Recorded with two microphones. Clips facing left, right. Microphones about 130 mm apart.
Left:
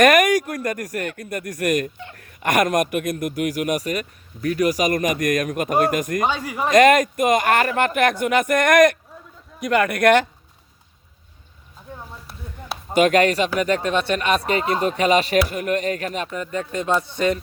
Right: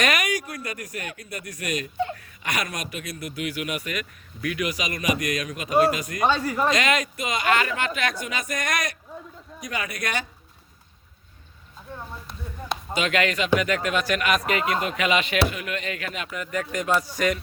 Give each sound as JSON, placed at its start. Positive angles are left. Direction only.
{"t": 0.0, "sound": "speech", "side_deg": 50}
{"t": 6.2, "sound": "speech", "side_deg": 15}
{"t": 6.7, "sound": "a man's voice", "side_deg": 50}
{"t": 12.9, "sound": "speech", "side_deg": 45}